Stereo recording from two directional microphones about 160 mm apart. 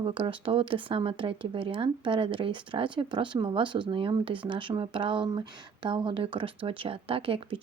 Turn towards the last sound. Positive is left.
turn(degrees=-35)  # may be behind; listen again after turning